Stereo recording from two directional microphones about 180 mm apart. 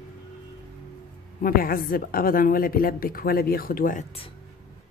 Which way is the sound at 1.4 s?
55° left (ahead or behind).